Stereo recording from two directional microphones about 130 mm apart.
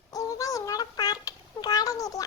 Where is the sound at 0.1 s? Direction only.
25° left (ahead or behind).